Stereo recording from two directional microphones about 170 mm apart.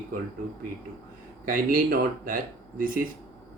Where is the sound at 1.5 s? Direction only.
55° right (ahead or behind).